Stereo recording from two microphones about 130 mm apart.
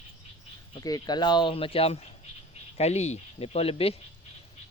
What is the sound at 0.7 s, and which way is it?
Speech, 30° left (ahead or behind).